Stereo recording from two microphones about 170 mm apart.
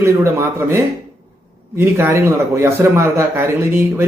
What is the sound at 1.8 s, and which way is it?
A man's voice, 15° right (ahead or behind).